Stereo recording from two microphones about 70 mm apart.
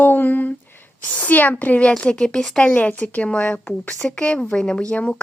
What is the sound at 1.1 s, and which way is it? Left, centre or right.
A woman's voice, left.